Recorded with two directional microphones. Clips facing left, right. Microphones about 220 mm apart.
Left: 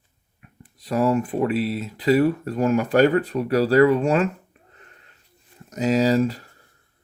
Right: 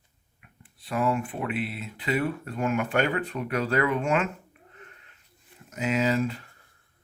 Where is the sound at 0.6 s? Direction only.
40° left (ahead or behind).